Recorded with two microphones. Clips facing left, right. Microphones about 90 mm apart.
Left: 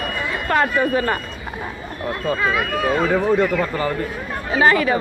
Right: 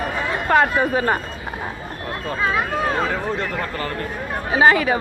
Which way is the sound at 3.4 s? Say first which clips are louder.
Left 6 dB; 15° left (ahead or behind).